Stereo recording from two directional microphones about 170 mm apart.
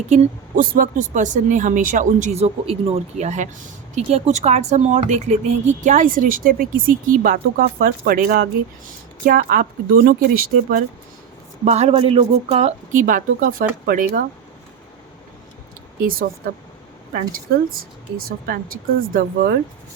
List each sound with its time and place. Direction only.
0.1 s speech: 55° right (ahead or behind)
11.6 s speech: 40° right (ahead or behind); by 14.3 s 60° right (ahead or behind)
16.0 s speech: 60° right (ahead or behind)
18.3 s speech: 60° right (ahead or behind)